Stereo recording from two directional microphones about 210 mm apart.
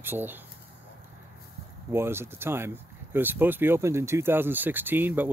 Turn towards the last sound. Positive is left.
turn(degrees=-10)  # may be behind; listen again after turning